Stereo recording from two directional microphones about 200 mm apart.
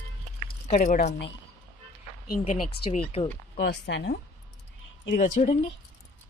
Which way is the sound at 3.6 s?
60° left (ahead or behind).